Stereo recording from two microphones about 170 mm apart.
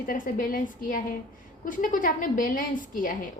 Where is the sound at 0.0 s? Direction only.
55° left (ahead or behind).